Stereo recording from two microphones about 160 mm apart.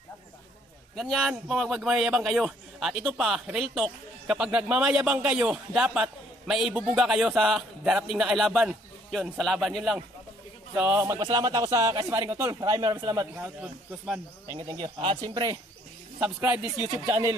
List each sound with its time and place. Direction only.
0.9 s a man's voice: centre (ahead or behind)
10.7 s a man's voice: 15° right (ahead or behind)
13.4 s a man's voice: 5° right (ahead or behind)
14.5 s a man's voice: 30° right (ahead or behind)